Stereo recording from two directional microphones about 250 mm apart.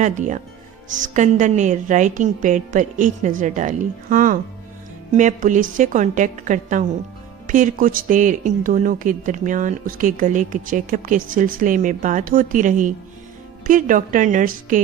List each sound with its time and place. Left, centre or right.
0.0 s a woman's voice: right